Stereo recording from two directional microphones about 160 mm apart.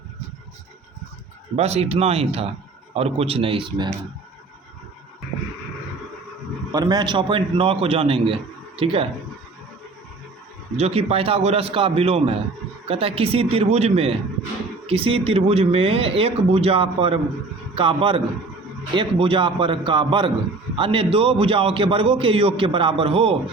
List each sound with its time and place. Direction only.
1.5 s a man's voice: 40° right (ahead or behind)
6.7 s a man's voice: 25° right (ahead or behind)
10.8 s a man's voice: 40° right (ahead or behind)